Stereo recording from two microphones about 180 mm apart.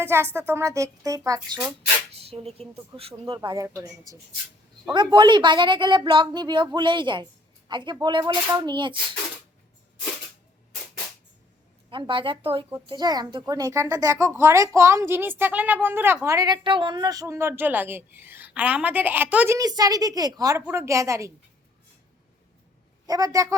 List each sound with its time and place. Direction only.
0.0 s a woman's voice: 15° right (ahead or behind)
2.2 s speech: 35° right (ahead or behind)
11.9 s a woman's voice: 30° right (ahead or behind); by 19.5 s 10° right (ahead or behind)
19.5 s speech: 20° right (ahead or behind)
23.0 s speech: 20° right (ahead or behind)